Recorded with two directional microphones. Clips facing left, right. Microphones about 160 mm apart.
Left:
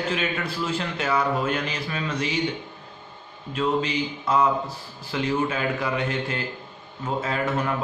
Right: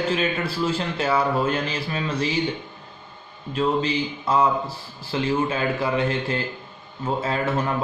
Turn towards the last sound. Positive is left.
turn(degrees=-30)  # may be behind; listen again after turning